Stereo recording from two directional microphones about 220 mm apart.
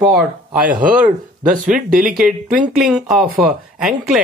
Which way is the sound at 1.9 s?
40° right (ahead or behind).